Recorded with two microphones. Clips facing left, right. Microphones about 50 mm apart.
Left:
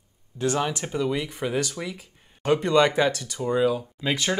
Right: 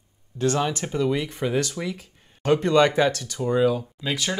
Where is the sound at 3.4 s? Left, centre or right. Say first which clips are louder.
Right 2 dB; centre.